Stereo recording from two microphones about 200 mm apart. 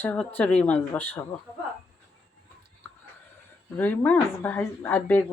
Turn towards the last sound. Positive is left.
turn(degrees=10)  # may be behind; listen again after turning